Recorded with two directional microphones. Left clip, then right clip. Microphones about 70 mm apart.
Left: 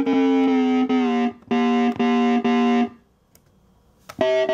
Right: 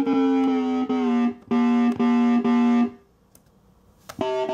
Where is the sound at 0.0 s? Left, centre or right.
Left.